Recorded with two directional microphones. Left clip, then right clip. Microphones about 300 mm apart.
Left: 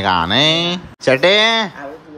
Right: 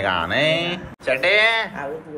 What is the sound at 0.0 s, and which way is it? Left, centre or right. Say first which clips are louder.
Speech: left 5 dB; centre.